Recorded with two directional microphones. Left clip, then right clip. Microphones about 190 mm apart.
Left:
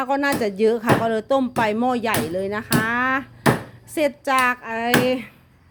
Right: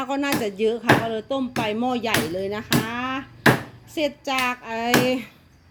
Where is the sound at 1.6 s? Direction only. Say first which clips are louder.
Left 4 dB; 15° left (ahead or behind).